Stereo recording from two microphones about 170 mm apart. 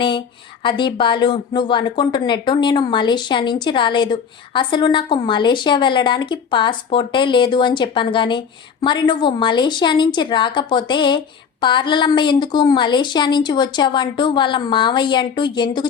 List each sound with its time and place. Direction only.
0.6 s speech: 30° left (ahead or behind)